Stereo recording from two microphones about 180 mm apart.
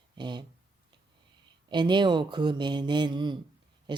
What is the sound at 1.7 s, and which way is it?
Speech, 25° right (ahead or behind).